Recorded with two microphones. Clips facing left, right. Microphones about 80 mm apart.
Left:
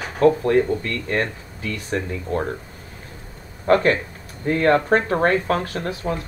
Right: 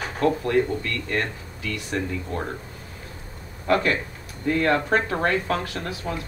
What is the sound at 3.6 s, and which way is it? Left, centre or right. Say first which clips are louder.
Speech: left 5 dB; left.